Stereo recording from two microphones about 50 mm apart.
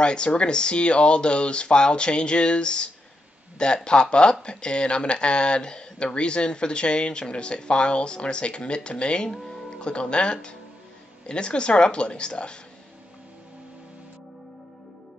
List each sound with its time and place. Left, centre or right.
0.0 s speech: centre